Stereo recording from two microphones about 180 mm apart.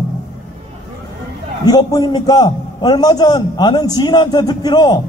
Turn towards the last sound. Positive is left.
turn(degrees=25)  # may be behind; listen again after turning